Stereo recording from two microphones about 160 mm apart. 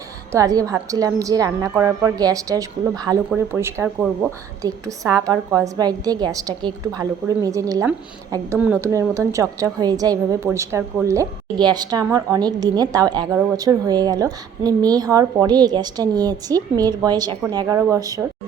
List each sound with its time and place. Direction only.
0.3 s a woman's voice: 20° right (ahead or behind)